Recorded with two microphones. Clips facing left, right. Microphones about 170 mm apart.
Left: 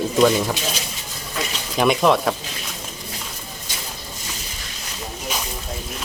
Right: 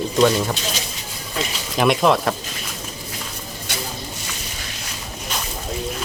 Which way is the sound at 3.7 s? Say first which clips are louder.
Right 7 dB; 70° right (ahead or behind).